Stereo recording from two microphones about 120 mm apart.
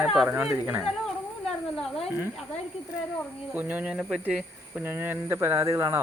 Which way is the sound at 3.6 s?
15° right (ahead or behind).